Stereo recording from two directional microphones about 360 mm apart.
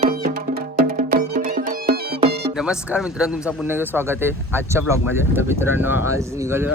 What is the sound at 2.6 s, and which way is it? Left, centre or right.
Speech, centre.